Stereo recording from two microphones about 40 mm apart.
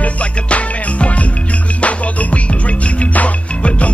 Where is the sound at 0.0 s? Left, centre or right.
Left.